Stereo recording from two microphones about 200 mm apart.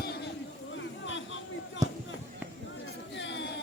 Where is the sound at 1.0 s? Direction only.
70° left (ahead or behind).